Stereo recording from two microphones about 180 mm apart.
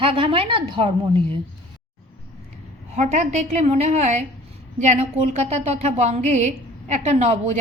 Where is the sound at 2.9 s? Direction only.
40° right (ahead or behind).